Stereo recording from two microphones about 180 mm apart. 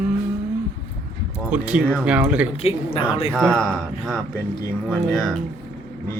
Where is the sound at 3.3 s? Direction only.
5° left (ahead or behind).